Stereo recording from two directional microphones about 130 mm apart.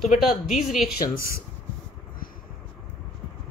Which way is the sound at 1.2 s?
90° left.